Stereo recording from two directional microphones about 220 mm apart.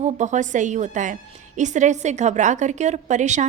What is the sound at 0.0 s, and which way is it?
A woman's voice, 35° right (ahead or behind).